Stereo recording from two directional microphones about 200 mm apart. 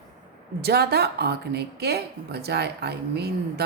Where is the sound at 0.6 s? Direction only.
55° right (ahead or behind).